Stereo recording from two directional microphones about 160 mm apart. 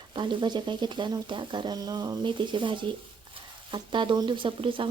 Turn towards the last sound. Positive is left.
turn(degrees=-30)  # may be behind; listen again after turning